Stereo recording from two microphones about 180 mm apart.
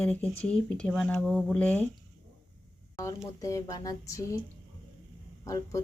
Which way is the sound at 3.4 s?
20° left (ahead or behind).